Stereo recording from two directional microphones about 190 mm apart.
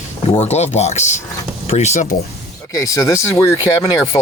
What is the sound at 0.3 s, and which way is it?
Speech, 35° left (ahead or behind).